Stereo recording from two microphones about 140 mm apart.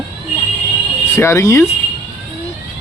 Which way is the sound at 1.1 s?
20° left (ahead or behind).